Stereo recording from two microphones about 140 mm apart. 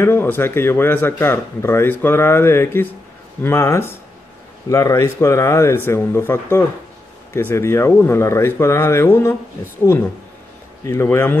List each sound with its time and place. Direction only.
0.0 s speech: 15° left (ahead or behind)
10.9 s speech: 20° left (ahead or behind)